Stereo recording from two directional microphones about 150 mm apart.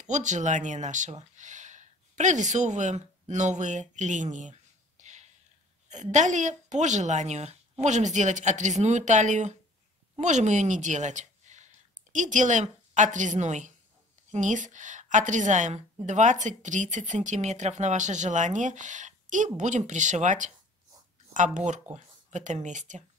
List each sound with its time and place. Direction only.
0.0 s speech: 55° right (ahead or behind)
3.9 s a sound: 55° right (ahead or behind)
5.9 s a woman's voice: 55° right (ahead or behind)